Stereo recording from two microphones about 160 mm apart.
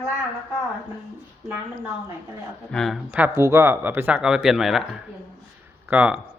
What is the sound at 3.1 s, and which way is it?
Speech, 10° right (ahead or behind).